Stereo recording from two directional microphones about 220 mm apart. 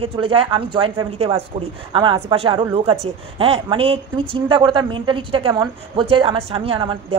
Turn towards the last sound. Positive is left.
turn(degrees=-25)  # may be behind; listen again after turning